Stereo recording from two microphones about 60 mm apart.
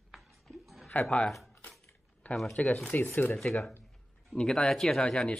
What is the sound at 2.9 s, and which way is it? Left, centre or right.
Speech, left.